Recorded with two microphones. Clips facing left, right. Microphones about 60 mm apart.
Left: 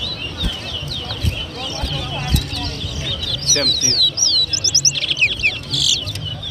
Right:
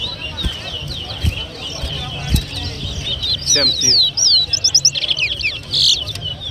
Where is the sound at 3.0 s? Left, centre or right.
Left.